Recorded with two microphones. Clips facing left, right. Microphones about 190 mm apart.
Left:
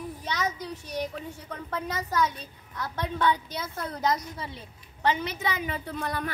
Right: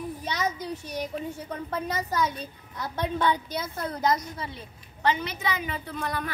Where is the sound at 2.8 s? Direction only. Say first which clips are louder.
Right 1 dB; 20° right (ahead or behind).